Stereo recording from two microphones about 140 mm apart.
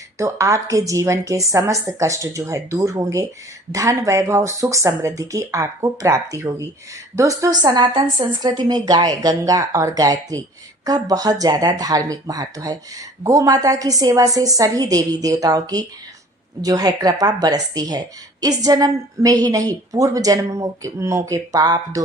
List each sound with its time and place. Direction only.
0.2 s speech: 20° right (ahead or behind)